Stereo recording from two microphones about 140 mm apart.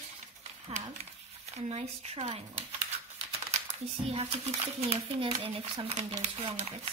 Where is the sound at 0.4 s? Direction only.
50° right (ahead or behind).